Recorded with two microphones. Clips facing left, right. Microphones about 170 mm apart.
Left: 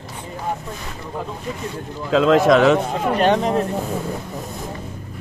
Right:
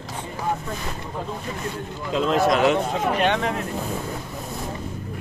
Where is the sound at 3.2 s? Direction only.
35° left (ahead or behind).